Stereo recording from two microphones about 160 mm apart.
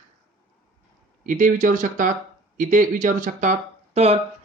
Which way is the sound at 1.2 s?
55° right (ahead or behind).